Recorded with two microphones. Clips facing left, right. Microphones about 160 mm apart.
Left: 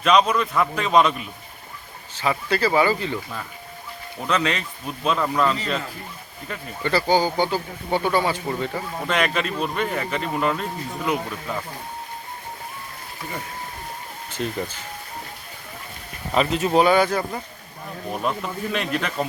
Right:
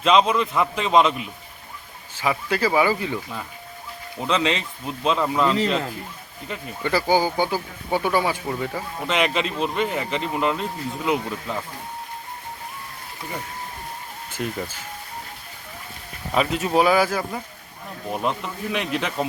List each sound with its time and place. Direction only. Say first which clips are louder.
0.0 s speech: even; 25° right (ahead or behind)
4.2 s speech: right 1 dB; 25° right (ahead or behind)
16.3 s speech: left 1 dB; 5° right (ahead or behind)
18.1 s speech: even; 15° right (ahead or behind)